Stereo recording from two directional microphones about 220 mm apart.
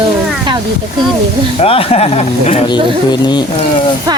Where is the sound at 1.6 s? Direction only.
25° left (ahead or behind).